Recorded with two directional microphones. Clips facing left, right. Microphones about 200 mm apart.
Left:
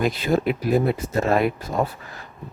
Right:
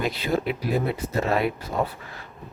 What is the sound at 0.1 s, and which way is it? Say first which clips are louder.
Speech: left 4 dB; 45° left (ahead or behind).